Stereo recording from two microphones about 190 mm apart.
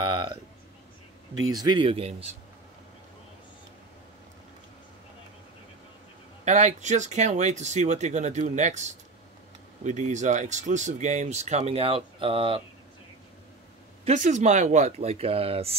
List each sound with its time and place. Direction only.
0.0 s a sound: 25° right (ahead or behind)
1.5 s speech: 20° right (ahead or behind)
6.4 s speech: 40° right (ahead or behind)
14.0 s speech: 40° right (ahead or behind)